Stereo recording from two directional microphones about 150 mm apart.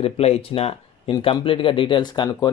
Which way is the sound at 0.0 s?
40° left (ahead or behind).